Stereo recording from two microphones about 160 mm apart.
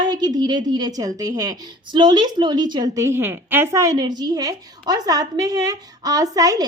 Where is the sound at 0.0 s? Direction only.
25° right (ahead or behind).